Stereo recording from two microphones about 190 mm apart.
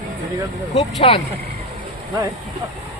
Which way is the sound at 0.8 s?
35° left (ahead or behind).